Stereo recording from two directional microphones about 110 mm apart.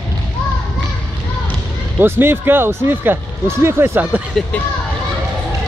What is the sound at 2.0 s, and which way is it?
Speech, 20° right (ahead or behind).